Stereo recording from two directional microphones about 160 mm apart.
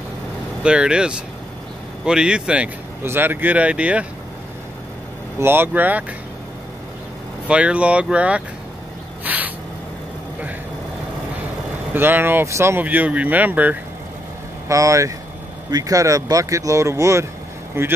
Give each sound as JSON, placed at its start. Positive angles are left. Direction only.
{"t": 0.7, "sound": "speech", "side_deg": -5}
{"t": 5.4, "sound": "speech", "side_deg": -15}
{"t": 7.4, "sound": "speech", "side_deg": -5}
{"t": 9.2, "sound": "a sound", "side_deg": -10}
{"t": 11.9, "sound": "speech", "side_deg": -15}